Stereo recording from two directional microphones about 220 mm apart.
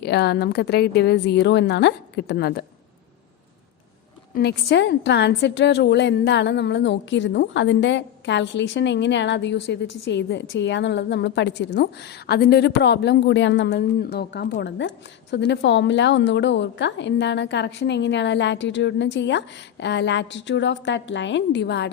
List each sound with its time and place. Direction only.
0.0 s a woman's voice: 50° left (ahead or behind)
4.4 s a woman's voice: 50° left (ahead or behind)